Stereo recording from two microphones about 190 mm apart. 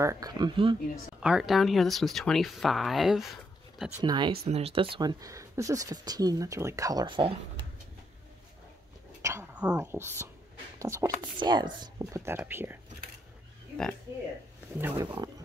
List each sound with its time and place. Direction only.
0.0 s speech: 20° right (ahead or behind)
1.2 s speech: 5° right (ahead or behind)
4.0 s speech: 25° right (ahead or behind)
9.2 s a sound: 15° right (ahead or behind)
10.8 s speech: 15° right (ahead or behind)
14.8 s speech: 10° right (ahead or behind)